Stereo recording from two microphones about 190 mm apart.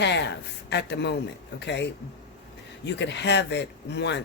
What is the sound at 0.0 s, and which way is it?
Speech, 65° left (ahead or behind).